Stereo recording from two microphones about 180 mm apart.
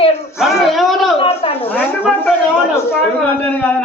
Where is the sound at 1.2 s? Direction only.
35° left (ahead or behind).